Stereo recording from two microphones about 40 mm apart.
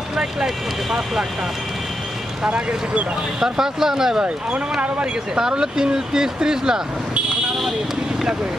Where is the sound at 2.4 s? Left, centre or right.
Right.